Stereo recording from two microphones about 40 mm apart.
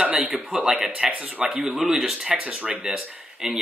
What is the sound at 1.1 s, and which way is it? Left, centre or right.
Speech, right.